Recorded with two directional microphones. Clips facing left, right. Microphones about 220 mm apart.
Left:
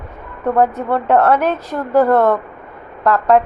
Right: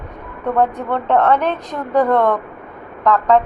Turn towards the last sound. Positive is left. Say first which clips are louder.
# left 1 dB
turn(degrees=5)  # may be behind; listen again after turning